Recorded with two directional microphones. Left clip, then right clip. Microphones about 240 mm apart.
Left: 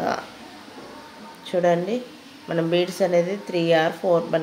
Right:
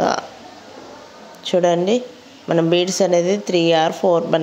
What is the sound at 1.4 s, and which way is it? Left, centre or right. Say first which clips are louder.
A woman's voice: right 5 dB; right.